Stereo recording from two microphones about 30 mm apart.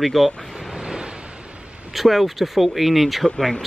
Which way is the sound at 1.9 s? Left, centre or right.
Centre.